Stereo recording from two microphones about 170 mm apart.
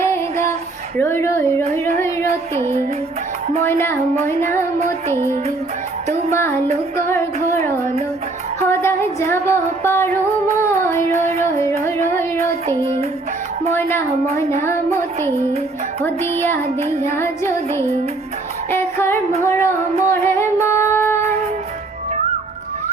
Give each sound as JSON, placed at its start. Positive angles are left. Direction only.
{"t": 0.0, "sound": "female singing", "side_deg": 15}
{"t": 0.9, "sound": "music", "side_deg": 15}
{"t": 5.0, "sound": "music", "side_deg": 15}
{"t": 6.3, "sound": "music", "side_deg": 15}
{"t": 8.6, "sound": "music", "side_deg": 15}
{"t": 13.7, "sound": "music", "side_deg": 15}
{"t": 18.7, "sound": "female singing", "side_deg": 15}
{"t": 19.4, "sound": "music", "side_deg": 15}